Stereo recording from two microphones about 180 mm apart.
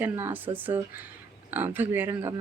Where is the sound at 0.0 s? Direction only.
10° right (ahead or behind).